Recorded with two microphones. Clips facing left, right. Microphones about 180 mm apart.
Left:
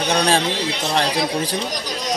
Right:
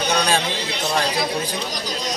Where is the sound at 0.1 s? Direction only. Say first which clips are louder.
Left 3 dB; 30° left (ahead or behind).